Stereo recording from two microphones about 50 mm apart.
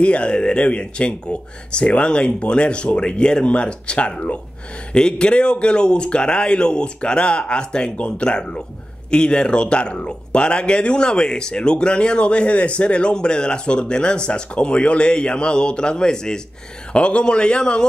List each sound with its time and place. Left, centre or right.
0.0 s speech: left